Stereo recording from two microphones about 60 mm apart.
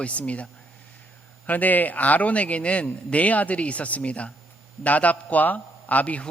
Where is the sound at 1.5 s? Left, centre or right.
Left.